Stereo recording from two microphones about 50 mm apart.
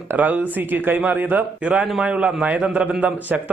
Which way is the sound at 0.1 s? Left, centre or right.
Right.